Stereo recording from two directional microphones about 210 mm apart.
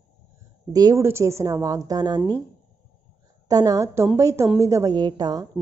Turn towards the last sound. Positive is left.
turn(degrees=-20)  # may be behind; listen again after turning